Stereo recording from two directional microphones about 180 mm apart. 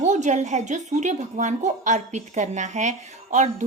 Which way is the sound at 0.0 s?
40° right (ahead or behind).